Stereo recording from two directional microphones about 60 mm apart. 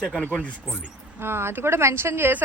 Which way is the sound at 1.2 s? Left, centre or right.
Right.